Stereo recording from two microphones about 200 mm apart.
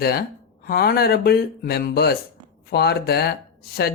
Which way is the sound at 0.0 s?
50° left (ahead or behind).